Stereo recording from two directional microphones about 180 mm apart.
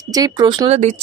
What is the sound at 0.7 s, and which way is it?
Speech, 40° right (ahead or behind).